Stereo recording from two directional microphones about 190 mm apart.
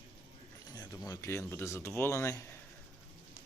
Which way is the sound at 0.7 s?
20° left (ahead or behind).